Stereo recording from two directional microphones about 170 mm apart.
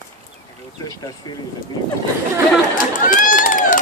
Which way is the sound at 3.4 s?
50° left (ahead or behind).